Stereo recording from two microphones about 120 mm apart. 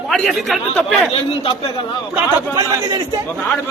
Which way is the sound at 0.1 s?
Centre (ahead or behind).